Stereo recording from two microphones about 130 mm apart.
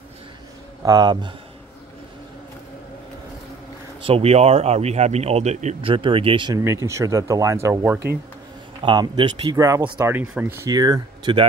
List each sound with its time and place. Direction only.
0.8 s speech: 35° right (ahead or behind)
4.0 s speech: 50° right (ahead or behind)
5.8 s speech: 45° right (ahead or behind)
6.5 s speech: 25° right (ahead or behind)
8.8 s speech: 35° right (ahead or behind)
9.6 s speech: 25° right (ahead or behind)